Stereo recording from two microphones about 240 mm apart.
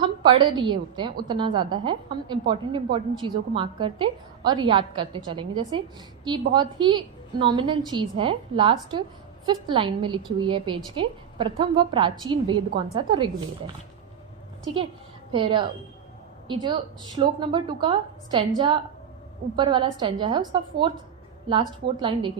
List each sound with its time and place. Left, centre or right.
0.0 s a woman's voice: centre
14.6 s a woman's voice: right